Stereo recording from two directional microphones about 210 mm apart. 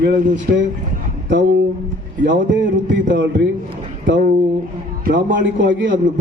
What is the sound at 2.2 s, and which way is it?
A man's voice, 60° right (ahead or behind).